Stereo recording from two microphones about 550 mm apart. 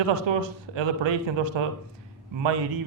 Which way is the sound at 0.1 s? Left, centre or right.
Right.